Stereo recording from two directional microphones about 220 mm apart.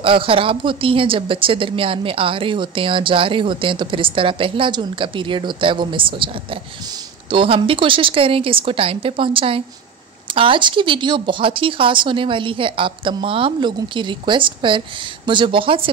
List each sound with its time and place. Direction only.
0.0 s speech: 25° right (ahead or behind)